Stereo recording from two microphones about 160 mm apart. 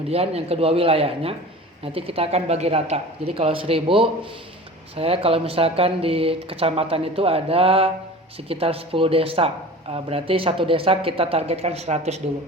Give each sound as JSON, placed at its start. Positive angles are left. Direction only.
{"t": 0.1, "sound": "speech", "side_deg": -40}